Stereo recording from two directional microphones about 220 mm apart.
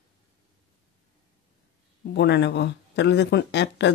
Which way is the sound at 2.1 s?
50° left (ahead or behind).